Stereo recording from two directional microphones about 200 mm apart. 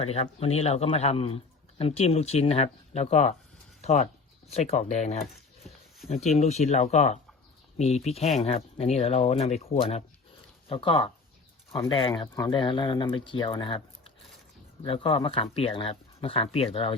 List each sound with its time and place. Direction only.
0.0 s speech: 30° left (ahead or behind)